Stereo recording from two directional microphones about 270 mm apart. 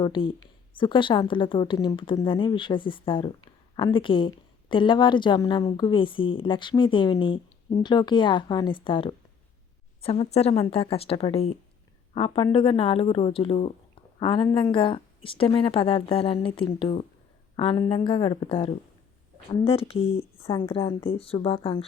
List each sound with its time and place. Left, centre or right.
0.0 s speech: centre